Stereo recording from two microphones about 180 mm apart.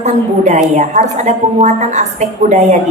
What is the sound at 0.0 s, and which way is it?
A woman's voice, 40° right (ahead or behind).